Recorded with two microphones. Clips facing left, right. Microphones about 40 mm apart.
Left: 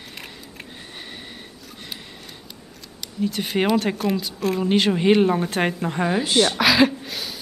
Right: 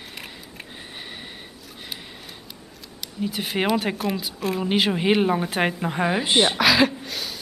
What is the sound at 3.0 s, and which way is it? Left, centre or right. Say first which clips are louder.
A woman's voice: left 3 dB; centre.